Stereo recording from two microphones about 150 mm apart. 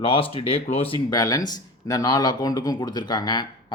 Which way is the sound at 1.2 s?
25° left (ahead or behind).